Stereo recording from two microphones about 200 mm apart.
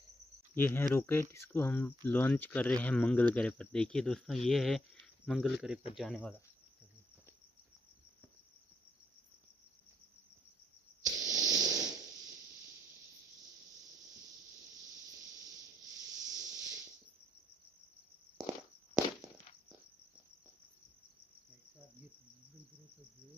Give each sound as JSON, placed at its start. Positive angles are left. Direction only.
{"t": 0.6, "sound": "speech", "side_deg": 10}
{"t": 11.1, "sound": "static", "side_deg": -20}
{"t": 15.4, "sound": "snake", "side_deg": -20}
{"t": 16.3, "sound": "a sound", "side_deg": -20}